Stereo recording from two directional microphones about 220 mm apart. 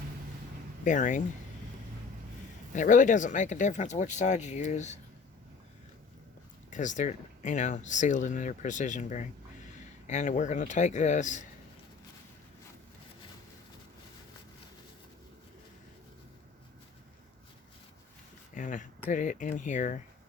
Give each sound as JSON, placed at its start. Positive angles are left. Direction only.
{"t": 0.9, "sound": "speech", "side_deg": 35}
{"t": 2.7, "sound": "speech", "side_deg": 35}
{"t": 6.7, "sound": "speech", "side_deg": 35}
{"t": 18.5, "sound": "speech", "side_deg": 35}